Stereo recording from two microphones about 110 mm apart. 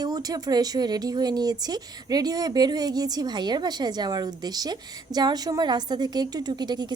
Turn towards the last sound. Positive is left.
turn(degrees=-40)  # may be behind; listen again after turning